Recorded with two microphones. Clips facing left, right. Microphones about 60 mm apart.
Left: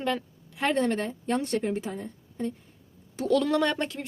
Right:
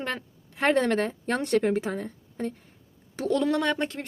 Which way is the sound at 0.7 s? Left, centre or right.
Right.